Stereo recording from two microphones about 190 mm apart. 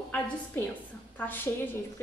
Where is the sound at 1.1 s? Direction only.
10° left (ahead or behind).